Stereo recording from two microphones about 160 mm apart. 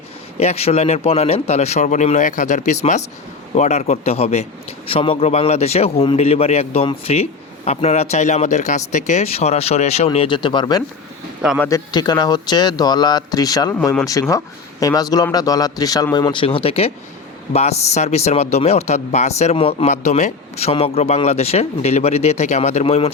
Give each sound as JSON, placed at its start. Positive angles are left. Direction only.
{"t": 0.3, "sound": "a man's voice", "side_deg": 40}
{"t": 11.9, "sound": "a man's voice", "side_deg": 25}